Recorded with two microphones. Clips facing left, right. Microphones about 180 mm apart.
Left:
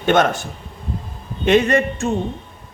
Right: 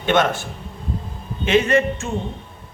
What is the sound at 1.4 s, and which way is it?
Speech, 40° left (ahead or behind).